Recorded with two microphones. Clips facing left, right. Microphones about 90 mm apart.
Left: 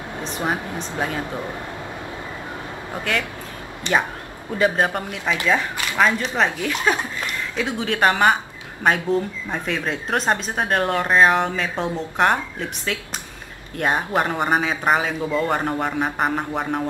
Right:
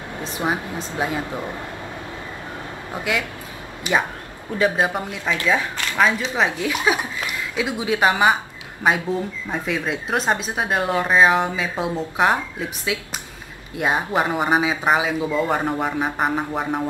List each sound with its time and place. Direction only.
0.4 s speech: 10° right (ahead or behind)
2.9 s a woman's voice: 10° right (ahead or behind)